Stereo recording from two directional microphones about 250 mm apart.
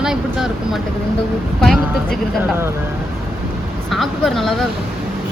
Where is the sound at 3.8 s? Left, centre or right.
Centre.